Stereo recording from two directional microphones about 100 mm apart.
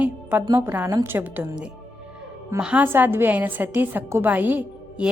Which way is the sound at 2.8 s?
20° right (ahead or behind).